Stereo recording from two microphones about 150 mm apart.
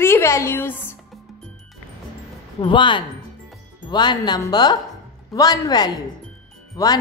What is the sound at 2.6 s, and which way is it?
Speech, 30° left (ahead or behind).